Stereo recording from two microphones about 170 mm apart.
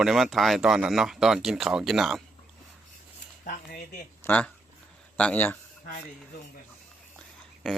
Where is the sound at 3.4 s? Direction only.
55° left (ahead or behind).